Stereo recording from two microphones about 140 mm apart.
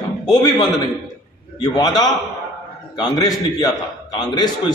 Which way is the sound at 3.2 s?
25° left (ahead or behind).